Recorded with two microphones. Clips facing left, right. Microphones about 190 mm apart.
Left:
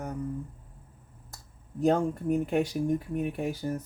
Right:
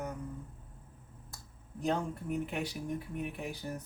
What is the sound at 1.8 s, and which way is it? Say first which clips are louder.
Speech: left 9 dB; 45° left (ahead or behind).